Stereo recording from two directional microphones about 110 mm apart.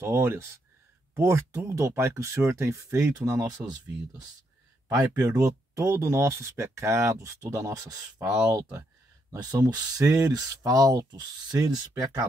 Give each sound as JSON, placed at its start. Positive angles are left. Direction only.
{"t": 0.0, "sound": "speech", "side_deg": -25}
{"t": 4.8, "sound": "speech", "side_deg": -30}